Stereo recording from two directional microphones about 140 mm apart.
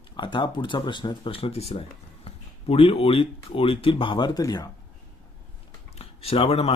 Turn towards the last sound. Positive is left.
turn(degrees=45)  # may be behind; listen again after turning